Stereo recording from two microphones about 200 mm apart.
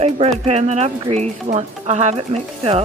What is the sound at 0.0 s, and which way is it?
Speech, 30° right (ahead or behind).